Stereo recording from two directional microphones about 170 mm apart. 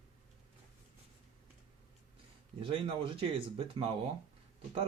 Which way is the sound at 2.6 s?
30° right (ahead or behind).